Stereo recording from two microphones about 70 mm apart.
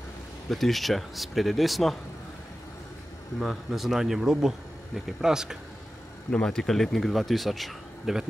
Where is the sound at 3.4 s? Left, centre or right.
Centre.